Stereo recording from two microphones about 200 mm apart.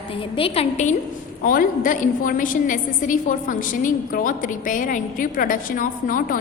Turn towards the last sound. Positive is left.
turn(degrees=40)  # may be behind; listen again after turning